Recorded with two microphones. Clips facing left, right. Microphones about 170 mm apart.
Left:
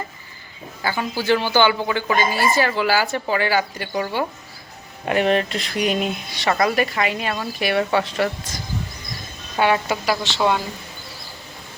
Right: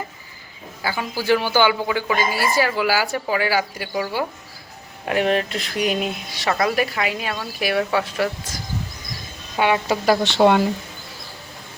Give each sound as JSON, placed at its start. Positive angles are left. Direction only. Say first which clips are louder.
{"t": 0.8, "sound": "a woman's voice", "louder": "left 1 dB", "side_deg": -5}
{"t": 9.6, "sound": "a woman's voice", "louder": "left 1 dB", "side_deg": -15}
{"t": 10.1, "sound": "a woman's voice", "louder": "right 6 dB", "side_deg": -55}